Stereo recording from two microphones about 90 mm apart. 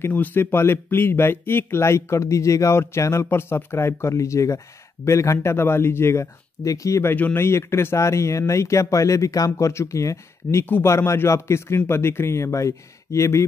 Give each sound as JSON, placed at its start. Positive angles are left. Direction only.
{"t": 0.0, "sound": "speech", "side_deg": 20}
{"t": 10.6, "sound": "speech", "side_deg": 25}